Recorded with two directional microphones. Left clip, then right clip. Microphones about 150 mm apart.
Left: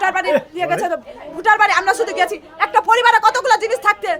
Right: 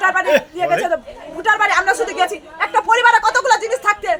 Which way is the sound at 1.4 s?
30° left (ahead or behind).